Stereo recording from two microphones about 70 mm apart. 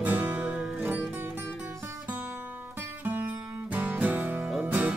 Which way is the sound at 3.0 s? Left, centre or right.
Right.